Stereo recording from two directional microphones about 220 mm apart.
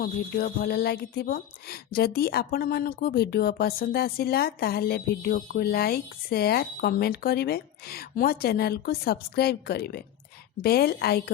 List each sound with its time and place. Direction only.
0.0 s a woman's voice: 40° left (ahead or behind)